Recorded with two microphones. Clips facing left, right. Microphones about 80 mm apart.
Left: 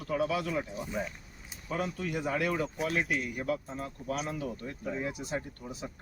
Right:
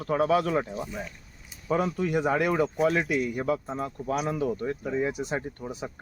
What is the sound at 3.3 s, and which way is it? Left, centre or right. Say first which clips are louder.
Speech: right 5 dB; right.